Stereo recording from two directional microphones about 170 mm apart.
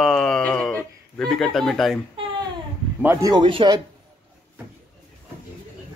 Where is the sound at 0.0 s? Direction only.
5° left (ahead or behind).